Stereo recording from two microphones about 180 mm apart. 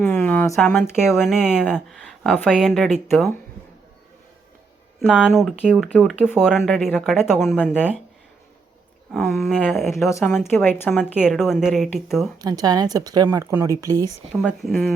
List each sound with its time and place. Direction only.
0.0 s speech: 10° left (ahead or behind)
2.2 s speech: 10° left (ahead or behind)
4.9 s speech: 5° left (ahead or behind)
9.1 s speech: centre (ahead or behind)
10.1 s speech: 15° left (ahead or behind)
11.2 s speech: centre (ahead or behind)
12.4 s speech: 20° right (ahead or behind)
14.3 s speech: centre (ahead or behind)